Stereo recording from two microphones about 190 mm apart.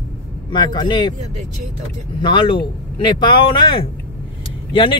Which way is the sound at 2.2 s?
25° left (ahead or behind).